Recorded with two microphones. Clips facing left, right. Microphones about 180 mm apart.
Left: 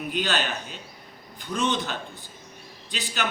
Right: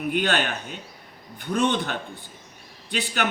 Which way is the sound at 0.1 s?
55° right (ahead or behind).